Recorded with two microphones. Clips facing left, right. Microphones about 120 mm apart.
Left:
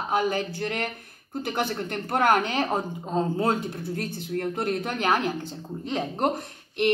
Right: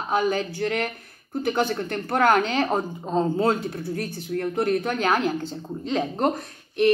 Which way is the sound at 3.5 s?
20° left (ahead or behind).